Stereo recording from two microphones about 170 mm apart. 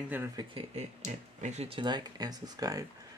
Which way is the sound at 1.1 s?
45° right (ahead or behind).